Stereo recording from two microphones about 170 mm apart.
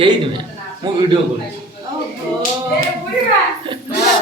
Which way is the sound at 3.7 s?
30° right (ahead or behind).